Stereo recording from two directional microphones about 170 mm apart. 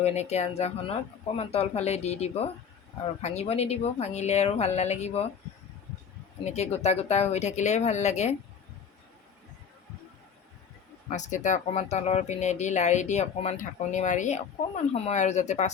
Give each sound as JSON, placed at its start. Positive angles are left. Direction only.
{"t": 0.0, "sound": "a woman's voice", "side_deg": 40}
{"t": 6.4, "sound": "a woman's voice", "side_deg": 40}
{"t": 11.1, "sound": "speech", "side_deg": 45}